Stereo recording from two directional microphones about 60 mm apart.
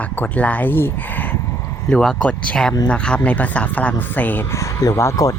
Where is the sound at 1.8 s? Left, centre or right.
Centre; by 4.4 s left.